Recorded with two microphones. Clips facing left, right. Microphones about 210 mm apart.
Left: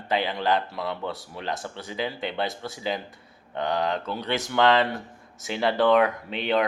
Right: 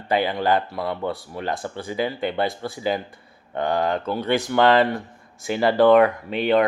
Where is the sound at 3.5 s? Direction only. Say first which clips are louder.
Right 4 dB; 50° right (ahead or behind).